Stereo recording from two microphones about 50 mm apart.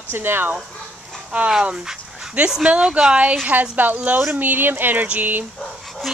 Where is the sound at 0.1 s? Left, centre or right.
Right.